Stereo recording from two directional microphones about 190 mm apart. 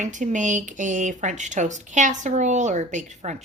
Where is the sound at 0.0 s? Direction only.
40° right (ahead or behind).